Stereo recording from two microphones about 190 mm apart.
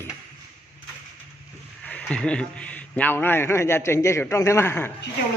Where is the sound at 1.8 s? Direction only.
5° left (ahead or behind).